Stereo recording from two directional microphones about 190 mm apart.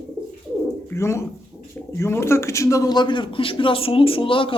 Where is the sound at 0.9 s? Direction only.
15° left (ahead or behind).